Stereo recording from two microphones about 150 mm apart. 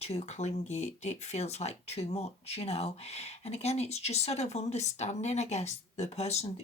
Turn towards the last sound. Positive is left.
turn(degrees=45)  # may be behind; listen again after turning